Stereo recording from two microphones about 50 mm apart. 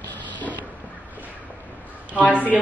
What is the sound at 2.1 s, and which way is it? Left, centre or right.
Speech, right.